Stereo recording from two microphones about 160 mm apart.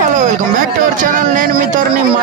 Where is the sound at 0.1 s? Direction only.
55° right (ahead or behind).